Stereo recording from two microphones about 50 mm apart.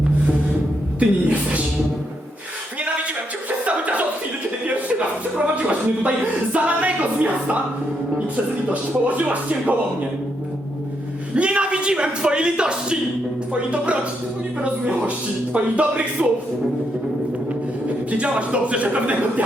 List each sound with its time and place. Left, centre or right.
0.9 s a man's voice: right
3.6 s music: right
4.6 s a man's voice: right
8.7 s speech: right
11.3 s a man's voice: right
18.1 s a man's voice: right